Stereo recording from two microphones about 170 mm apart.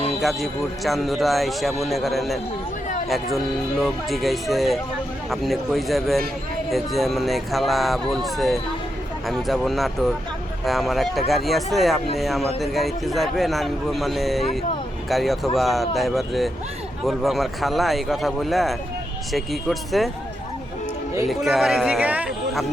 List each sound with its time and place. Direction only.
0.2 s a man's voice: centre (ahead or behind)
21.2 s a man's voice: centre (ahead or behind)